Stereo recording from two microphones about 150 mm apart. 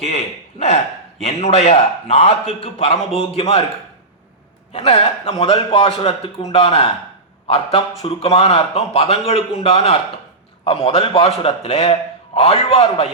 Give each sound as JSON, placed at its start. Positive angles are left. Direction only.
{"t": 1.2, "sound": "a man's voice", "side_deg": 45}
{"t": 4.7, "sound": "a man's voice", "side_deg": 40}